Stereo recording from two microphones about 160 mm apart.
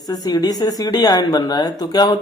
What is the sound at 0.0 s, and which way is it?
A man's voice, 25° left (ahead or behind).